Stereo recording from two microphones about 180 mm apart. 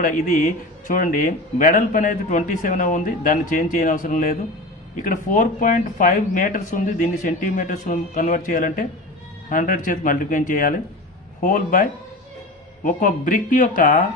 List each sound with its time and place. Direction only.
0.0 s speech: 50° left (ahead or behind)